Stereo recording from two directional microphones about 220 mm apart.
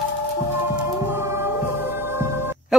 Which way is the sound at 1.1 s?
10° right (ahead or behind).